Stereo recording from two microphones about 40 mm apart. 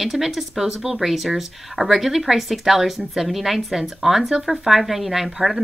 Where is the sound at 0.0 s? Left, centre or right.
Centre.